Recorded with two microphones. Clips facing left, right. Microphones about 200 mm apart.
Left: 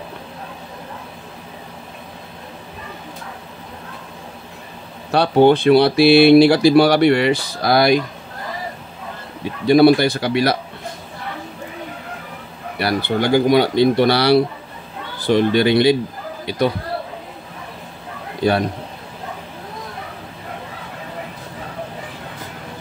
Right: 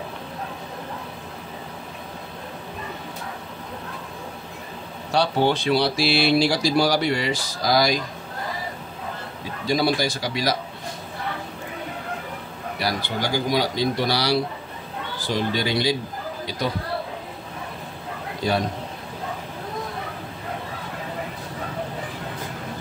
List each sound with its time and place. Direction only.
5.1 s speech: 55° left (ahead or behind)
9.4 s speech: 60° left (ahead or behind)
12.7 s speech: 60° left (ahead or behind)